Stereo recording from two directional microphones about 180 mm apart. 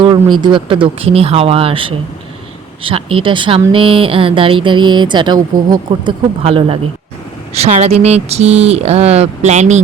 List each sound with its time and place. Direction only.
0.0 s speech: 25° right (ahead or behind); by 9.8 s 40° right (ahead or behind)